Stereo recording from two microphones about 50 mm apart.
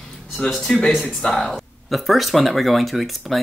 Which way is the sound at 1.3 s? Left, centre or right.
Centre.